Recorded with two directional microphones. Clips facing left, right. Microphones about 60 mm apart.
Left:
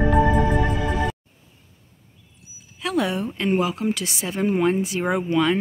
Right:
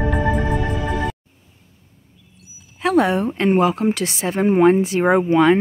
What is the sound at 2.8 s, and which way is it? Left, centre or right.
A woman's voice, right.